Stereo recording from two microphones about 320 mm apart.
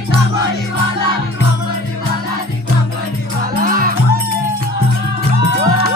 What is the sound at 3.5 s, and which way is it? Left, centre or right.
Music, right.